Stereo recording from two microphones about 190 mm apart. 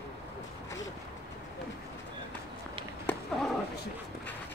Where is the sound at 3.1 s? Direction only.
Centre (ahead or behind).